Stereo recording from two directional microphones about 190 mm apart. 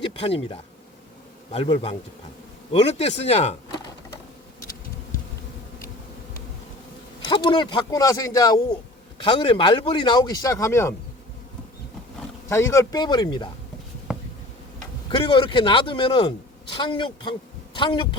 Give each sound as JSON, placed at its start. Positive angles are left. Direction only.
{"t": 0.1, "sound": "insect", "side_deg": 30}
{"t": 1.5, "sound": "speech", "side_deg": 30}
{"t": 7.2, "sound": "a man's voice", "side_deg": 25}
{"t": 12.5, "sound": "a man's voice", "side_deg": 15}
{"t": 15.1, "sound": "a man's voice", "side_deg": 25}